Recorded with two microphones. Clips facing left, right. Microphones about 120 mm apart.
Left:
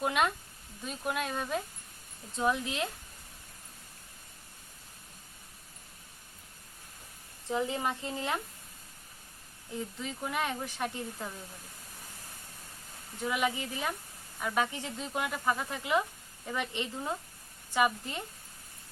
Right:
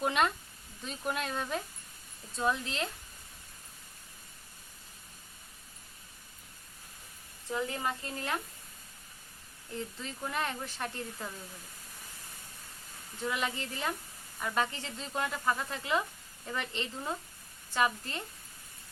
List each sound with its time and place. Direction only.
0.0 s speech: 5° left (ahead or behind)
7.4 s speech: 20° left (ahead or behind)
9.7 s speech: 10° left (ahead or behind)
13.2 s speech: 10° left (ahead or behind)